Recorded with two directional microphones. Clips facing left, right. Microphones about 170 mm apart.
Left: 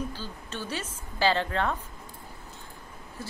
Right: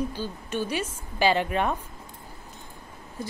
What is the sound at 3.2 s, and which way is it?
Speech, 15° right (ahead or behind).